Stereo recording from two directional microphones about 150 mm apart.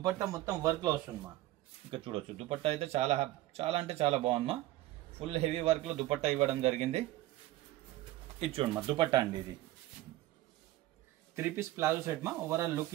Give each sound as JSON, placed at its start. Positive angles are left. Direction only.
{"t": 0.0, "sound": "speech", "side_deg": -25}
{"t": 1.9, "sound": "a man's voice", "side_deg": -35}
{"t": 8.4, "sound": "speech", "side_deg": -40}
{"t": 11.3, "sound": "speech", "side_deg": -15}